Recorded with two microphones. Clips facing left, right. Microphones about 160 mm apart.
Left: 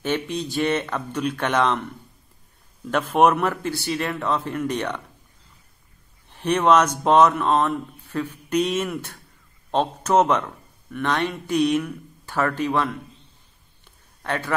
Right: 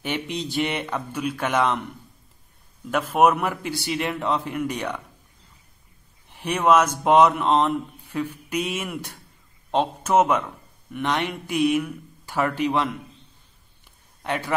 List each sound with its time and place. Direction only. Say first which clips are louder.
0.0 s speech: left 3 dB; 15° right (ahead or behind)
2.9 s speech: left 1 dB; 5° right (ahead or behind)
6.2 s speech: left 2 dB; 15° right (ahead or behind)
14.2 s speech: even; 15° right (ahead or behind)